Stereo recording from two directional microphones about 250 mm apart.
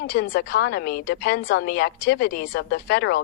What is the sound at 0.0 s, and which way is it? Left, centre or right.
Speech, left.